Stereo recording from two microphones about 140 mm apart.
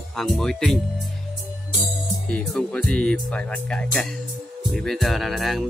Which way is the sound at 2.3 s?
5° left (ahead or behind).